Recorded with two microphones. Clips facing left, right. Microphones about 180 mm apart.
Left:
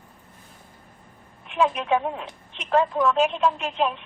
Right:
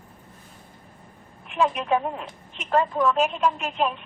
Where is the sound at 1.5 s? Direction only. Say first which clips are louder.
Left 1 dB; centre (ahead or behind).